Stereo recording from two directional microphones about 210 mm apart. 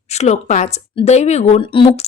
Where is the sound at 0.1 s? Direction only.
30° left (ahead or behind).